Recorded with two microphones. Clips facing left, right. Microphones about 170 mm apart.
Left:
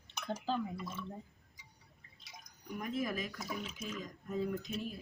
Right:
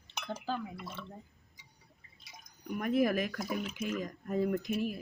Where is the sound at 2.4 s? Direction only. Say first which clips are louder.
Right 6 dB; 65° right (ahead or behind).